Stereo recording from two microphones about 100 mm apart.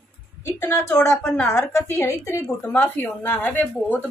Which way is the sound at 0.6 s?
30° left (ahead or behind).